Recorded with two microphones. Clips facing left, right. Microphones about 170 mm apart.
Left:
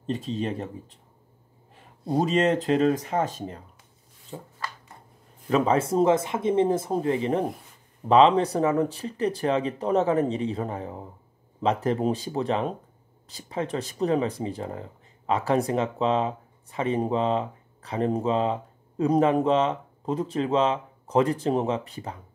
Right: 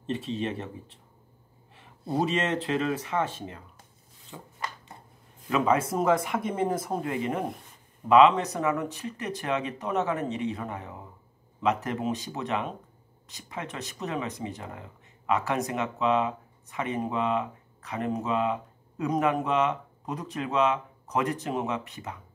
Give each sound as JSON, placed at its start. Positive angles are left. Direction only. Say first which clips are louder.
{"t": 0.1, "sound": "speech", "louder": "left 2 dB", "side_deg": 40}
{"t": 2.1, "sound": "speech", "louder": "left 5 dB", "side_deg": 40}
{"t": 5.5, "sound": "speech", "louder": "left 3 dB", "side_deg": 30}